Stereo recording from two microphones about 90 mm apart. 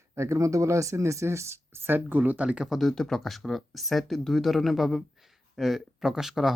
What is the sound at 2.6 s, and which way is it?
Speech, centre (ahead or behind).